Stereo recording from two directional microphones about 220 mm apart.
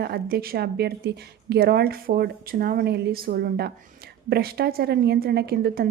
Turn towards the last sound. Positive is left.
turn(degrees=-45)  # may be behind; listen again after turning